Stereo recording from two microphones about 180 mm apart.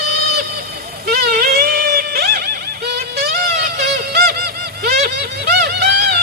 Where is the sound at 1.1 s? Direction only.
60° right (ahead or behind).